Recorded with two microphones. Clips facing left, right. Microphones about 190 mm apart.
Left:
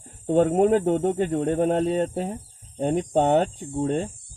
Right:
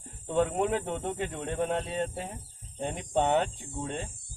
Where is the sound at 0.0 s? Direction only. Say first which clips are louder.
Left 8 dB; 45° left (ahead or behind).